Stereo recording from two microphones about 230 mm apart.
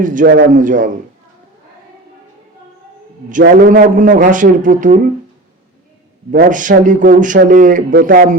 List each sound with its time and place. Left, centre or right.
0.0 s speech: right
3.4 s speech: right
6.3 s speech: right